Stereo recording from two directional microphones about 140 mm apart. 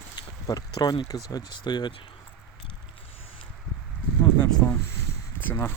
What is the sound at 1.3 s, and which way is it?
Speech, 30° left (ahead or behind).